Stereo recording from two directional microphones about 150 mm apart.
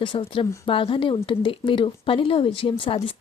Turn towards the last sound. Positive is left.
turn(degrees=35)  # may be behind; listen again after turning